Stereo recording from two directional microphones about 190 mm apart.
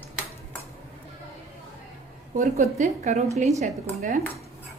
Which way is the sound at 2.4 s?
40° right (ahead or behind).